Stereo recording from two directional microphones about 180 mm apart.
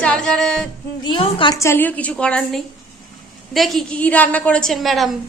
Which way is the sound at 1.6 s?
10° left (ahead or behind).